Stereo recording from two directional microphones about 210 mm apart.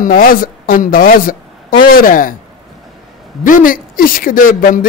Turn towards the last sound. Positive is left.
turn(degrees=40)  # may be behind; listen again after turning